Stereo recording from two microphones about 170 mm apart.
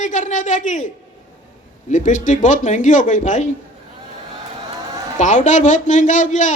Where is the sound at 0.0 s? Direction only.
45° left (ahead or behind).